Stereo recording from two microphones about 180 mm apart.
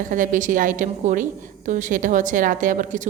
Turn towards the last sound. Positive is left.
turn(degrees=-45)  # may be behind; listen again after turning